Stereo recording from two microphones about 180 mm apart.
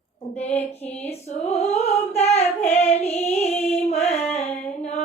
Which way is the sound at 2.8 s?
35° left (ahead or behind).